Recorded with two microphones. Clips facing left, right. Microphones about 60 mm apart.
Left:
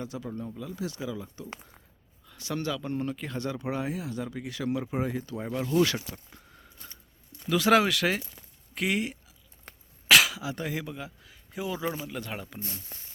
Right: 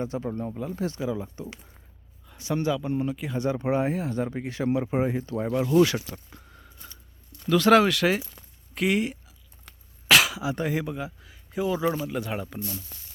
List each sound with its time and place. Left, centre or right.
0.0 s speech: right; by 3.3 s centre
3.3 s speech: right
5.4 s speech: centre
7.3 s speech: centre
9.7 s a sound: left
10.1 s throat clearing: centre
10.4 s speech: right
11.0 s speech: centre
12.5 s speech: left